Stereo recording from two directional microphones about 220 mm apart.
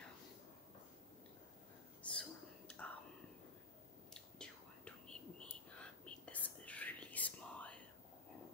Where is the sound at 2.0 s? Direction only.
5° left (ahead or behind).